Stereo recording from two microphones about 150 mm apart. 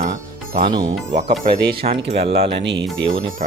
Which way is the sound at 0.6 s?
30° right (ahead or behind).